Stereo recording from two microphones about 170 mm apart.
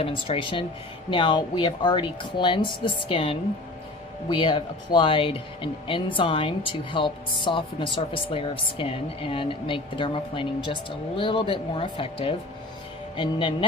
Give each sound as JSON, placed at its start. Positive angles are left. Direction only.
{"t": 0.0, "sound": "speech", "side_deg": 30}